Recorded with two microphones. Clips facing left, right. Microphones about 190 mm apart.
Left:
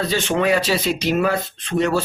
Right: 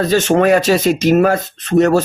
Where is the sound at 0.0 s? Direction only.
45° right (ahead or behind).